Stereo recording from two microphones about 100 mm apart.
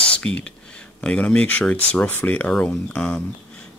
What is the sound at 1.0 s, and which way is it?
Speech, 10° left (ahead or behind).